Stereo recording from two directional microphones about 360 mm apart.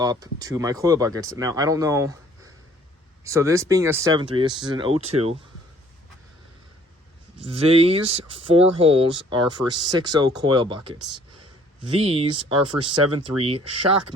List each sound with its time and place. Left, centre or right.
0.0 s speech: centre
7.4 s speech: centre
11.0 s a sound: right
11.8 s speech: centre
13.7 s speech: right